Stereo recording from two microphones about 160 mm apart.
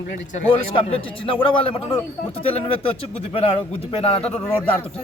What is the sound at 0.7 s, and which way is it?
A man's voice, 35° left (ahead or behind).